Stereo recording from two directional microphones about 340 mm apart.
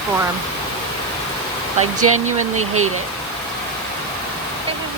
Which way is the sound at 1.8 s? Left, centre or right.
Right.